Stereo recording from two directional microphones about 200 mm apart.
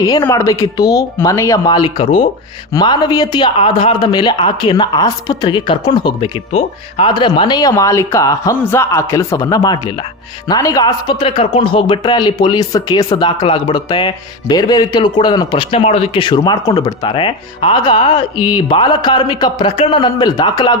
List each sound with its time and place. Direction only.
0.0 s a man's voice: 15° left (ahead or behind)